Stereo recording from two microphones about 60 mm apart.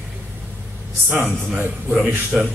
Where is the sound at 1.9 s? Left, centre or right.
Centre.